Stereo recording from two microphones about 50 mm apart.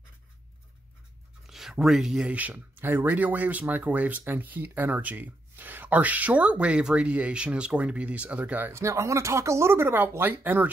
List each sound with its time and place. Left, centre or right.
1.5 s speech: centre
2.1 s speech: right
8.7 s speech: right